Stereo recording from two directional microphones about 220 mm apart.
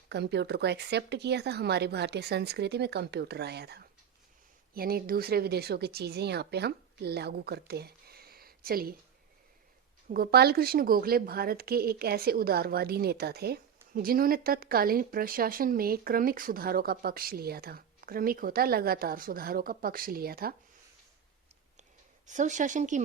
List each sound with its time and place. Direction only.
0.1 s speech: 50° right (ahead or behind)
10.1 s speech: 45° right (ahead or behind)
22.3 s speech: 35° right (ahead or behind)